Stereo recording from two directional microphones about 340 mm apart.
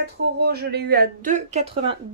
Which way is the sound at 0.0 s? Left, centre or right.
Right.